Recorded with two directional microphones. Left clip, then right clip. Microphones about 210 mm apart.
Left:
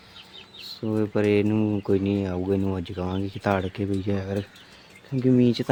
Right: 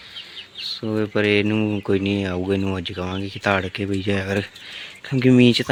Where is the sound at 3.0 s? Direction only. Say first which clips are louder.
Right 2 dB; 5° right (ahead or behind).